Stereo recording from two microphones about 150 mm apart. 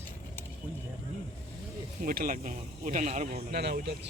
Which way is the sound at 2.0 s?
75° right (ahead or behind).